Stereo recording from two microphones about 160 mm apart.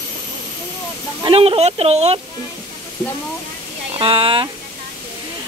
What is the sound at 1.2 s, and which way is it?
Speech, 35° right (ahead or behind).